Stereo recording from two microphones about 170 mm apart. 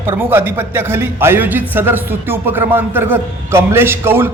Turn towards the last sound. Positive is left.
turn(degrees=-15)  # may be behind; listen again after turning